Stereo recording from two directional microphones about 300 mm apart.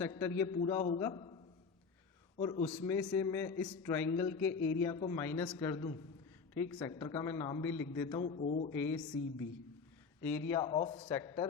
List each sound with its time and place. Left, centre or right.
0.0 s a man's voice: centre
2.4 s a man's voice: centre
4.4 s speech: left
4.8 s a man's voice: centre
8.9 s speech: centre
10.5 s a man's voice: centre